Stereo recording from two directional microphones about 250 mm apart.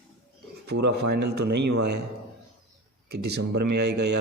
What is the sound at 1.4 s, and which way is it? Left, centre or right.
Speech, right.